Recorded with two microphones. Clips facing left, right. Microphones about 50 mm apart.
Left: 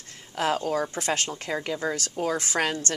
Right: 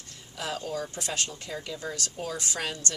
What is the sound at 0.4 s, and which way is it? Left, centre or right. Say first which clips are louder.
Speech: left 9 dB; left.